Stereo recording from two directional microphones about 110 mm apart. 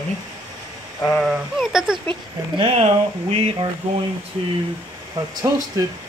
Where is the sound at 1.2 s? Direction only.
Centre (ahead or behind).